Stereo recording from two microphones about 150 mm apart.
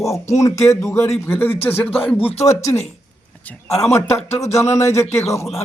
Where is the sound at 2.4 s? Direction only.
20° left (ahead or behind).